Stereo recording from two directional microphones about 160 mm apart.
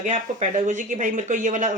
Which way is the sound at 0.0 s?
50° right (ahead or behind).